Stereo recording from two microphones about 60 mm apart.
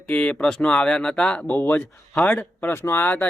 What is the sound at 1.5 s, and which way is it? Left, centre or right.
Speech, left.